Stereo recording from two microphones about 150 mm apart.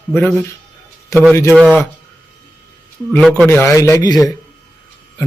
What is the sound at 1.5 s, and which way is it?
Speech, 5° right (ahead or behind).